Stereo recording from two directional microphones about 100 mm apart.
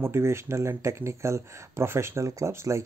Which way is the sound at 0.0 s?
25° right (ahead or behind).